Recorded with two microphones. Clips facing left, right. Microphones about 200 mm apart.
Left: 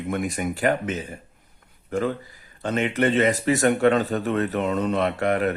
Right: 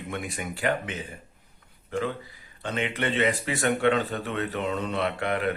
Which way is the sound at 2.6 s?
45° left (ahead or behind).